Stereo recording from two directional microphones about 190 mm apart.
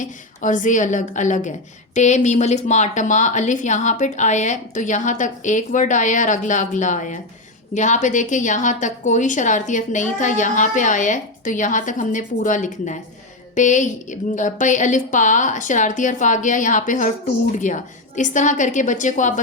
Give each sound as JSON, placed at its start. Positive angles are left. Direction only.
{"t": 0.0, "sound": "a woman's voice", "side_deg": 40}